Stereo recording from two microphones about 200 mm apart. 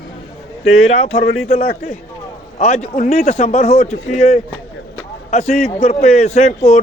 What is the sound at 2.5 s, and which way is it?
A man's voice, 35° left (ahead or behind).